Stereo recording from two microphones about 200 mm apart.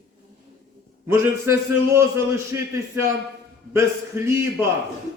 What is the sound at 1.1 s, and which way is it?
A man's voice, 15° right (ahead or behind).